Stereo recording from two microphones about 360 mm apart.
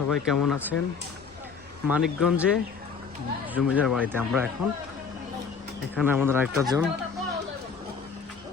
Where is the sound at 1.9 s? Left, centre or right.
Centre.